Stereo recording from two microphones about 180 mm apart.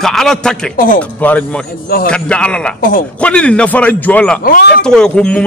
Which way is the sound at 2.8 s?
55° left (ahead or behind).